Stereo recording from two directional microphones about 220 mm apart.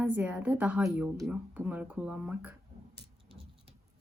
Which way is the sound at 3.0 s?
25° right (ahead or behind).